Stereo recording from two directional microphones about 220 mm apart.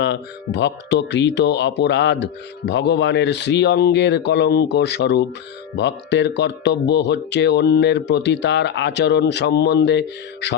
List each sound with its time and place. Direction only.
0.0 s speech: 50° left (ahead or behind)